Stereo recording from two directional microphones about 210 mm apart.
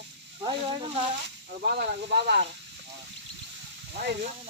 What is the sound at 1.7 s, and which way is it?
Speech, 50° right (ahead or behind).